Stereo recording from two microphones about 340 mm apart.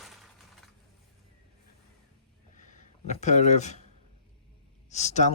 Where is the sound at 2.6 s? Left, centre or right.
Left.